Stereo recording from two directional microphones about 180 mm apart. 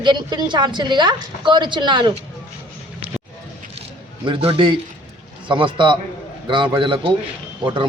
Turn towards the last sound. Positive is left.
turn(degrees=-30)  # may be behind; listen again after turning